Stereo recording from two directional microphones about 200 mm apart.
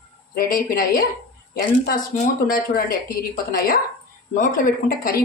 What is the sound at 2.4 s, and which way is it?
Speech, 45° left (ahead or behind).